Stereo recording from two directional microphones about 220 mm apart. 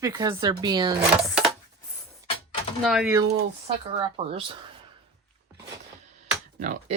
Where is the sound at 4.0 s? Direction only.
25° right (ahead or behind).